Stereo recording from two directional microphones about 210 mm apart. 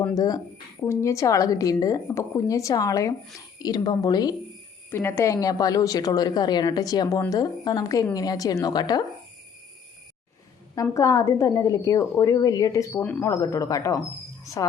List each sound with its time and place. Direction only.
0.1 s a woman's voice: 15° left (ahead or behind)
10.8 s a woman's voice: 15° left (ahead or behind)